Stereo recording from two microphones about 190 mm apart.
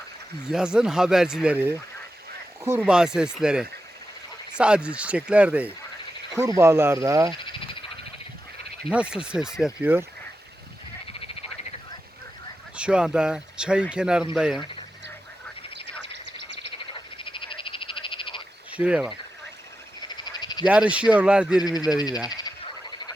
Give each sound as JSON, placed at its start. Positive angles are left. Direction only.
{"t": 0.4, "sound": "speech", "side_deg": -5}
{"t": 8.9, "sound": "speech", "side_deg": -5}
{"t": 12.7, "sound": "speech", "side_deg": -5}
{"t": 15.7, "sound": "a sound", "side_deg": -65}
{"t": 17.2, "sound": "frog", "side_deg": 25}
{"t": 18.7, "sound": "speech", "side_deg": -5}
{"t": 20.1, "sound": "a sound", "side_deg": 25}
{"t": 20.7, "sound": "speech", "side_deg": -5}
{"t": 21.6, "sound": "speech", "side_deg": 20}
{"t": 22.3, "sound": "frog", "side_deg": 20}